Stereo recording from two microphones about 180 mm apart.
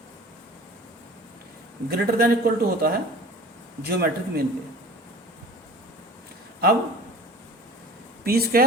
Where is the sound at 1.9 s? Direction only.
60° right (ahead or behind).